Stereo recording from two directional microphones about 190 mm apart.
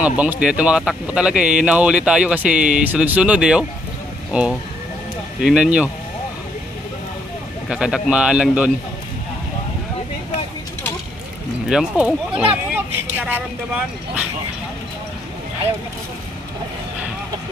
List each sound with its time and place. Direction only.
0.0 s speech: 5° right (ahead or behind)
7.7 s speech: 5° right (ahead or behind)
11.7 s speech: 5° right (ahead or behind)